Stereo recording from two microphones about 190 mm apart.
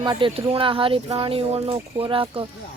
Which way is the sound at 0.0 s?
25° right (ahead or behind).